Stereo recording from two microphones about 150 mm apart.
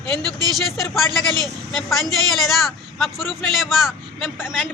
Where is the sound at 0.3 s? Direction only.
25° right (ahead or behind).